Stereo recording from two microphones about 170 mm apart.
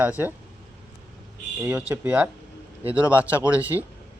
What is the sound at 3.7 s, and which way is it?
Speech, 15° right (ahead or behind).